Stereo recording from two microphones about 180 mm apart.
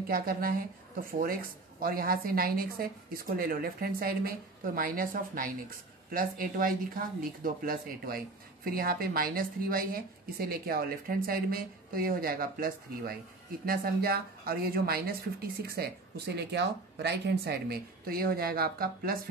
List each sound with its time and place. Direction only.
0.1 s speech: 55° right (ahead or behind)